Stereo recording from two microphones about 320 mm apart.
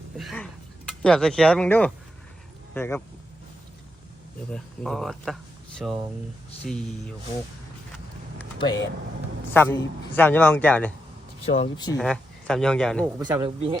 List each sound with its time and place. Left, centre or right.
0.2 s a sound: centre
1.0 s a man's voice: centre
4.5 s a man's voice: centre
8.4 s a sound: centre
9.5 s a man's voice: centre
11.4 s speech: centre
11.9 s a man's voice: centre
13.2 s speech: centre